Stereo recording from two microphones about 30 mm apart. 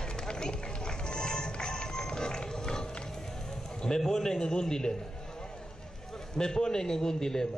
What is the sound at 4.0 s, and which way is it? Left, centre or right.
A man's voice, centre.